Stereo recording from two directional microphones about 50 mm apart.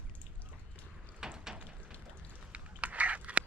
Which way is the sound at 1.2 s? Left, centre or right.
Centre.